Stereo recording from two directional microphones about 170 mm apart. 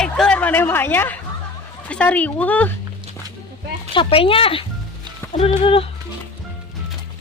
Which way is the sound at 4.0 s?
35° left (ahead or behind).